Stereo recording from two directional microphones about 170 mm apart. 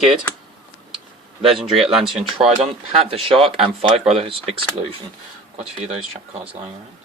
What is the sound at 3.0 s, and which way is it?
Speech, 35° right (ahead or behind).